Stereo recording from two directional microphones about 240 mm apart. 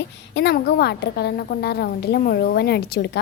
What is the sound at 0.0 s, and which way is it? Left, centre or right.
A woman's voice, left.